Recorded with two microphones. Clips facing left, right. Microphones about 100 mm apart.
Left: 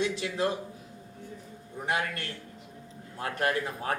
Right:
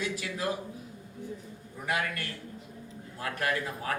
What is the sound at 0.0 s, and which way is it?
Speech, 25° left (ahead or behind).